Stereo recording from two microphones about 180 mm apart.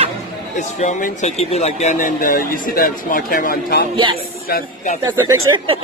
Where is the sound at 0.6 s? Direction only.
40° left (ahead or behind).